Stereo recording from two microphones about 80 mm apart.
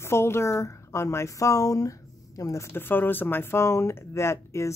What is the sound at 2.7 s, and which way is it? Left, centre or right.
Speech, left.